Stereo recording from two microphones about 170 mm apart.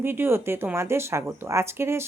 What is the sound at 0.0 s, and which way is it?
A woman's voice, 15° right (ahead or behind).